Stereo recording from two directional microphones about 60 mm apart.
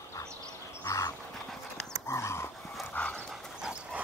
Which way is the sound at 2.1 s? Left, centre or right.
Left.